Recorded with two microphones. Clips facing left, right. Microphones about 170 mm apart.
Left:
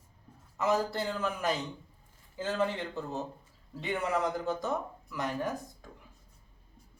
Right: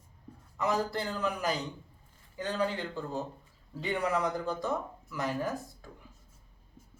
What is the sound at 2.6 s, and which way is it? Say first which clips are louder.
Speech: even; 20° left (ahead or behind).